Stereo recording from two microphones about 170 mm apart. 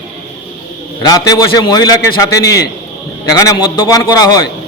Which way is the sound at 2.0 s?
75° left (ahead or behind).